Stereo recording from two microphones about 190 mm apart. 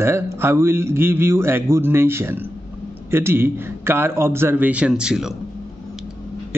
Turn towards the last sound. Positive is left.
turn(degrees=-5)  # may be behind; listen again after turning